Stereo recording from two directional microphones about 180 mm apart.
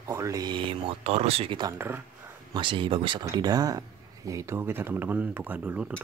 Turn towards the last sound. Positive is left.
turn(degrees=-10)  # may be behind; listen again after turning